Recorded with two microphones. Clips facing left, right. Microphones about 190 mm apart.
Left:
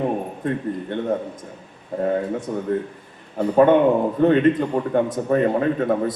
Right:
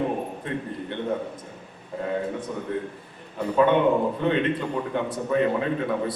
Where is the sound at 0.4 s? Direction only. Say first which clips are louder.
Left 8 dB; 45° left (ahead or behind).